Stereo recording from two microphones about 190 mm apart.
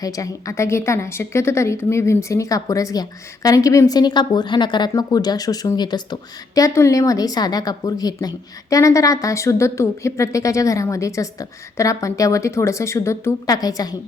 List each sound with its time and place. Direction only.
0.0 s a woman's voice: 15° left (ahead or behind)